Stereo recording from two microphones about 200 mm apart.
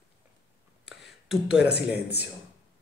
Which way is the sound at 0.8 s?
5° right (ahead or behind).